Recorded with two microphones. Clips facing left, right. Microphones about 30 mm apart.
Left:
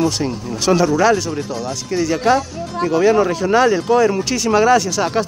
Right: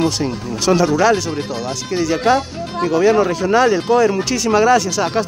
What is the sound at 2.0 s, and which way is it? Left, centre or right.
Speech, centre.